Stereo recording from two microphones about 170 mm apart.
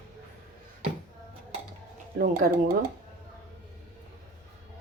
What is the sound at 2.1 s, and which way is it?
Speech, 60° right (ahead or behind).